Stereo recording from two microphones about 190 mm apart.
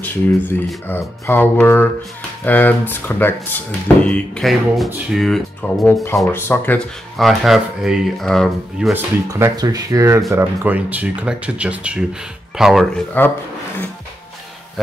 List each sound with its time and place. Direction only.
0.0 s speech: 10° left (ahead or behind)
7.2 s speech: centre (ahead or behind)
9.3 s speech: 20° right (ahead or behind); by 13.3 s 5° left (ahead or behind)